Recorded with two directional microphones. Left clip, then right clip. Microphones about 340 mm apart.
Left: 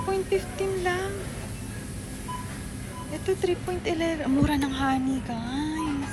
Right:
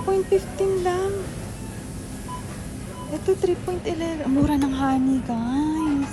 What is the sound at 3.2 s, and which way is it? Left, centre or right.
Speech, centre.